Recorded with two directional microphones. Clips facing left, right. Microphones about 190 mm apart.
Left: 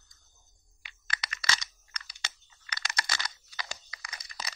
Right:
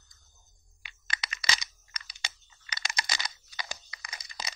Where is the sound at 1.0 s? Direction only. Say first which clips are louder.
Even; 15° right (ahead or behind).